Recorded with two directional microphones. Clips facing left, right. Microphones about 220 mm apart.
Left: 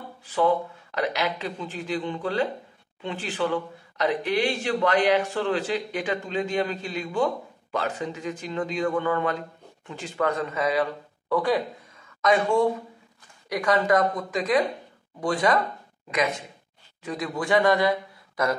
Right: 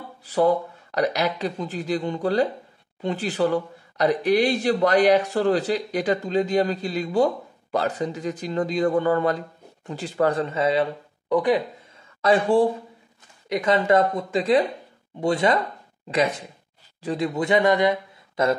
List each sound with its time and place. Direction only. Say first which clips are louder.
0.2 s speech: right 3 dB; 40° right (ahead or behind); by 11.6 s 20° right (ahead or behind)
12.2 s speech: right 3 dB; 30° right (ahead or behind)
13.5 s speech: right 2 dB; 20° right (ahead or behind)